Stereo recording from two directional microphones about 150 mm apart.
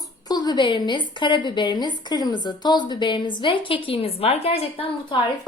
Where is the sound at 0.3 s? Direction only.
25° left (ahead or behind).